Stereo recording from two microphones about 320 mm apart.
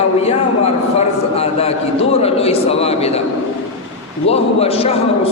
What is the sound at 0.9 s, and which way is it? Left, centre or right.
A man's voice, centre.